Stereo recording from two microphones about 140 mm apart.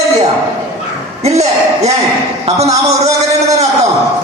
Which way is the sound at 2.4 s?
50° right (ahead or behind).